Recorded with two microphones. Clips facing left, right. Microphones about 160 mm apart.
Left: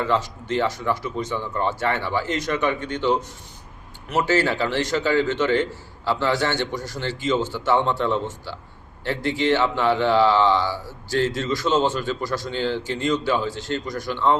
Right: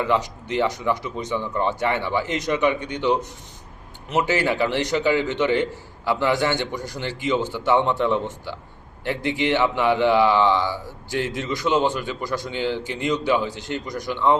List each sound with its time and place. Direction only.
0.0 s a man's voice: 15° right (ahead or behind)